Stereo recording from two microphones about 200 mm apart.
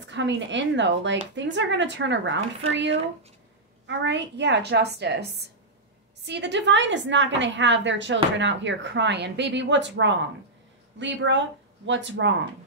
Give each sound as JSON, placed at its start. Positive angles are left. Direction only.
{"t": 0.0, "sound": "a woman's voice", "side_deg": -65}
{"t": 3.8, "sound": "a woman's voice", "side_deg": -65}